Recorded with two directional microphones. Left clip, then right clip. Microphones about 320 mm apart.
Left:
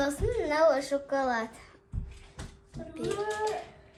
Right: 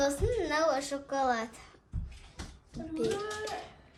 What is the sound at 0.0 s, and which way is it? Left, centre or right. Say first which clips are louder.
A child's voice: even; centre.